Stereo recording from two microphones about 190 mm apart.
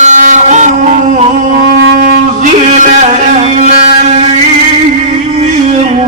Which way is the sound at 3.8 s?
35° right (ahead or behind).